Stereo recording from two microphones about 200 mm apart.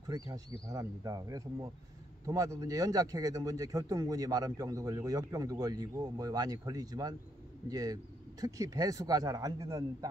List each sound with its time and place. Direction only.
0.3 s speech: 15° right (ahead or behind)